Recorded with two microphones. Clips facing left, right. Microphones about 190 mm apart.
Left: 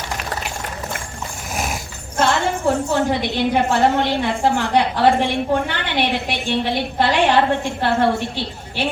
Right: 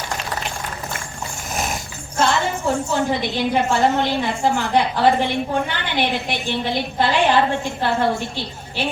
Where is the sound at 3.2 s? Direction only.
60° left (ahead or behind).